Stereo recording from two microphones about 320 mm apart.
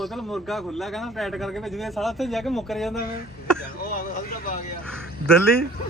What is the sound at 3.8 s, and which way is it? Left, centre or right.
Vehicle, left.